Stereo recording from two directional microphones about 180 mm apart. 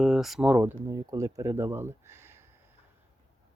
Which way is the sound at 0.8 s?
20° right (ahead or behind).